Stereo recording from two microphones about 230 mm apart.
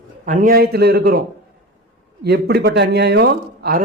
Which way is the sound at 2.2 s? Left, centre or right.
Right.